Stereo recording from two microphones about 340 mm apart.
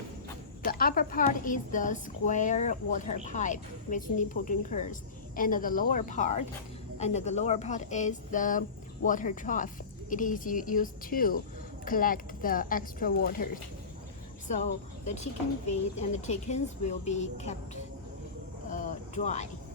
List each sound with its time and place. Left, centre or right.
0.6 s a woman's voice: left
18.7 s vehicle: left